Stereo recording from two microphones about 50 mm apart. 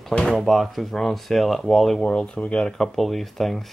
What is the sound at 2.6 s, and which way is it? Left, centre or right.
Speech, centre.